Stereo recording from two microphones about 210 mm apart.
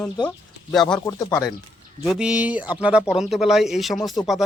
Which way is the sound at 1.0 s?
15° left (ahead or behind).